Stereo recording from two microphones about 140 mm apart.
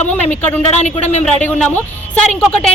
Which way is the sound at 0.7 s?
55° left (ahead or behind).